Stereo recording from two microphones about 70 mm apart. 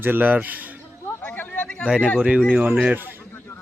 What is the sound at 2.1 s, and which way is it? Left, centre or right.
Speech, centre.